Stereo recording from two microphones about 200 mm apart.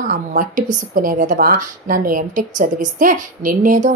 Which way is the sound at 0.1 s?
40° right (ahead or behind).